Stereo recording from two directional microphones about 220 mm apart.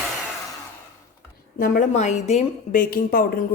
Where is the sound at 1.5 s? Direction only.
40° left (ahead or behind).